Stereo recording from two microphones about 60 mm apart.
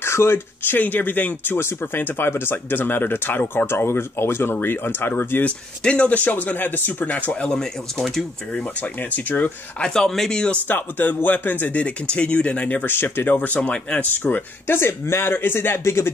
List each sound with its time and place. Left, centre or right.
0.0 s speech: left
0.7 s speech: left
5.4 s speech: left
7.5 s speech: centre
9.1 s speech: left
9.8 s speech: centre
10.7 s speech: left
12.8 s speech: left
14.2 s speech: left
15.8 s speech: left